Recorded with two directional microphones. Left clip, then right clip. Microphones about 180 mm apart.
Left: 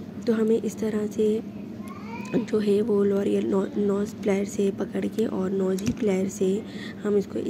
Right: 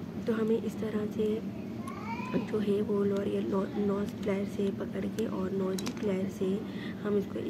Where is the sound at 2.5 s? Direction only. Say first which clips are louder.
Left 8 dB; 35° left (ahead or behind).